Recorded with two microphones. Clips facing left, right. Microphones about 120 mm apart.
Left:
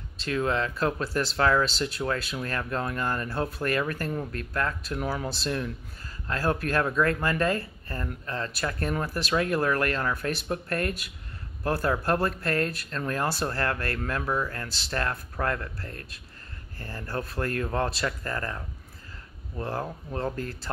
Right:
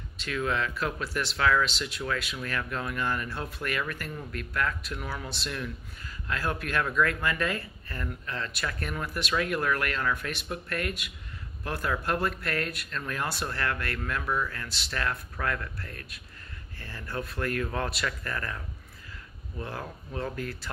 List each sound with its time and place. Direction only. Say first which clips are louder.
0.2 s speech: left 3 dB; 30° left (ahead or behind)
19.6 s speech: left 6 dB; 35° left (ahead or behind)